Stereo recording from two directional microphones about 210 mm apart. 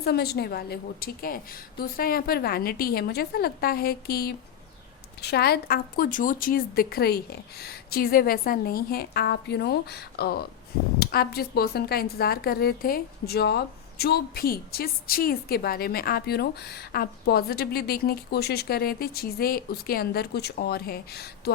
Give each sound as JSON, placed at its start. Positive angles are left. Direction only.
{"t": 0.0, "sound": "a woman's voice", "side_deg": 50}